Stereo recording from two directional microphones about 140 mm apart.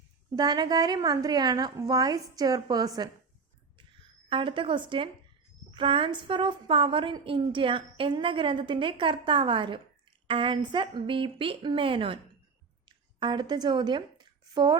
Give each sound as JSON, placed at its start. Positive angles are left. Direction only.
{"t": 0.3, "sound": "a woman's voice", "side_deg": -30}
{"t": 4.3, "sound": "a woman's voice", "side_deg": -35}